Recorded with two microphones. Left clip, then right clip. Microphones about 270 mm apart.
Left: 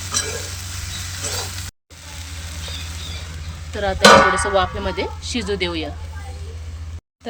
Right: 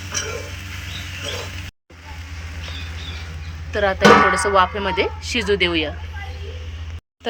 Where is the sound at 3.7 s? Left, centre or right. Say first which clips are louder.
Left 2 dB; centre.